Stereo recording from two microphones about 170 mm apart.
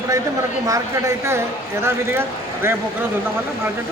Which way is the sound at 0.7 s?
15° right (ahead or behind).